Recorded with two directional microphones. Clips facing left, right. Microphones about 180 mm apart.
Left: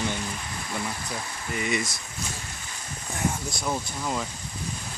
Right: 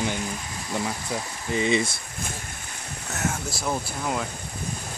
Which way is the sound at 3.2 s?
5° right (ahead or behind).